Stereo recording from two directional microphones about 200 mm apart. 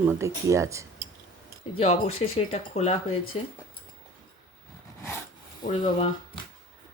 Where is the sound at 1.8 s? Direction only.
30° left (ahead or behind).